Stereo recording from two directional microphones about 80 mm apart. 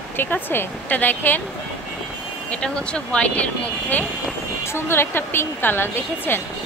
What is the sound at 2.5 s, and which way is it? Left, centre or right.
Speech, centre.